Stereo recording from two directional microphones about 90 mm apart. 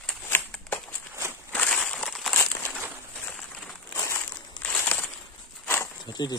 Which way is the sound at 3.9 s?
35° left (ahead or behind).